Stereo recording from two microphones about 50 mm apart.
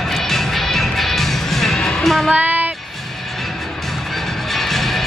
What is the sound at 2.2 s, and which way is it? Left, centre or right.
Child singing, right.